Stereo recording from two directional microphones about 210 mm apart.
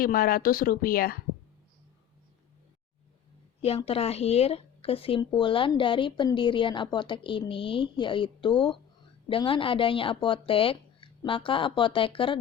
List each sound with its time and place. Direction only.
0.0 s speech: 45° left (ahead or behind)
3.8 s speech: 30° left (ahead or behind)